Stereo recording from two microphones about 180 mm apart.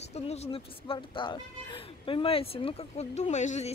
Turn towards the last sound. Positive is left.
turn(degrees=40)  # may be behind; listen again after turning